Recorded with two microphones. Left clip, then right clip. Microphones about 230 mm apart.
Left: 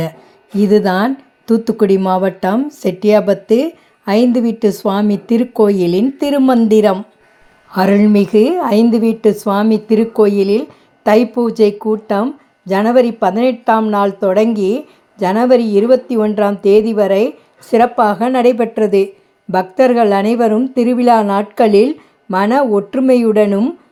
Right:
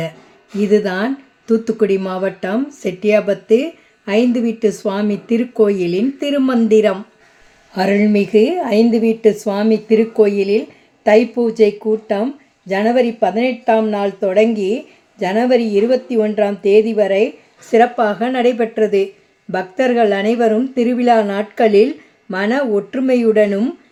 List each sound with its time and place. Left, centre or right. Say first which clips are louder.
0.6 s speech: left 3 dB; left